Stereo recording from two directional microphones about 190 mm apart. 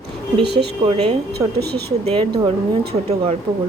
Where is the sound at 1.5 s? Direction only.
55° right (ahead or behind).